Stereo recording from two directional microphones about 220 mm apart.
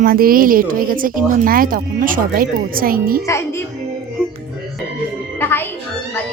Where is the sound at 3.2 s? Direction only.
15° left (ahead or behind).